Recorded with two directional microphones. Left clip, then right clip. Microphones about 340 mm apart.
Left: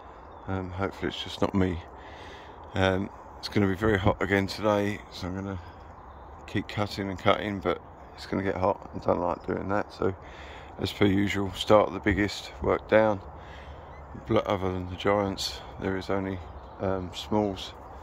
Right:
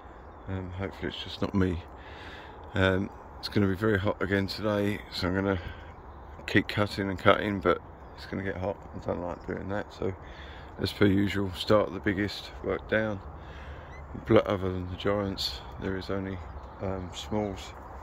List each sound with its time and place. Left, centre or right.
0.5 s speech: centre
8.3 s speech: centre
10.8 s speech: centre
14.2 s speech: centre
17.3 s speech: left